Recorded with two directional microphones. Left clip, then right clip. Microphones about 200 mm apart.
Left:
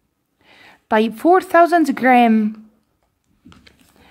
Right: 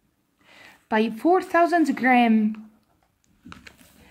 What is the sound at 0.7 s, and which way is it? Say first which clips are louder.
Speech: left 7 dB; 50° left (ahead or behind).